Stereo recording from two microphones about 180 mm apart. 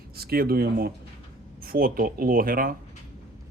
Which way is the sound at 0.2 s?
60° right (ahead or behind).